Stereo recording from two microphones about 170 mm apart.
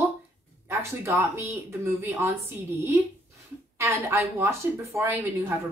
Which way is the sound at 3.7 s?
15° right (ahead or behind).